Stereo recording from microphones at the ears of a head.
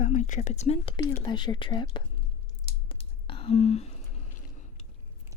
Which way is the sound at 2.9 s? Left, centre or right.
Left.